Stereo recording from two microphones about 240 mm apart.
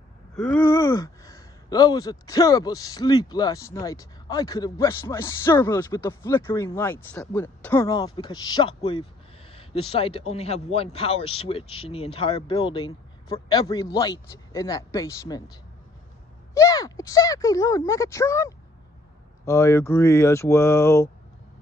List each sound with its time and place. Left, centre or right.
0.4 s a man's voice: centre
16.5 s speech: centre